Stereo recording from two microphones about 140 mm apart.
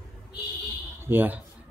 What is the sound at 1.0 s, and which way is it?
Speech, 15° right (ahead or behind).